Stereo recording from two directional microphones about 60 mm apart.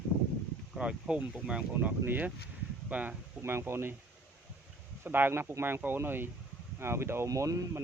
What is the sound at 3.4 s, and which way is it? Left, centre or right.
Speech, right.